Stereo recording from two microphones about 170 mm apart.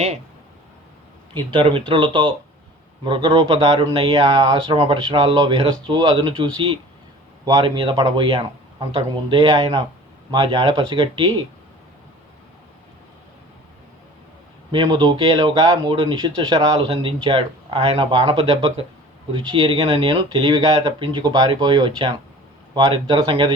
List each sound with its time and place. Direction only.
1.3 s speech: 30° right (ahead or behind)
14.7 s speech: 30° right (ahead or behind)